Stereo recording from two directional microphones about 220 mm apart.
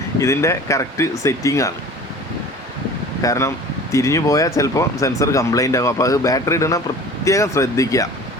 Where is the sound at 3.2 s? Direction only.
15° left (ahead or behind).